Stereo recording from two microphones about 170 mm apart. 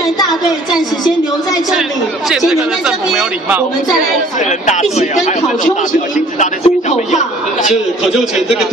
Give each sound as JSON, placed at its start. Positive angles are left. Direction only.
{"t": 1.7, "sound": "speech", "side_deg": 0}
{"t": 4.9, "sound": "speech", "side_deg": 40}
{"t": 6.6, "sound": "a man's voice", "side_deg": 45}
{"t": 7.7, "sound": "speech", "side_deg": -5}